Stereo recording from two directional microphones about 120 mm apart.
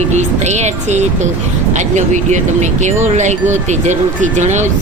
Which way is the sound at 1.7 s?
85° right.